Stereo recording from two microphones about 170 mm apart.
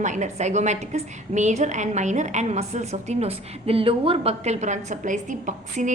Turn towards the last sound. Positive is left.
turn(degrees=-45)  # may be behind; listen again after turning